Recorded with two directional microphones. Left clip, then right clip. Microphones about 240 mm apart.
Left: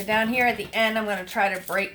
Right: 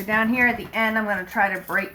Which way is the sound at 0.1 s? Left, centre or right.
Left.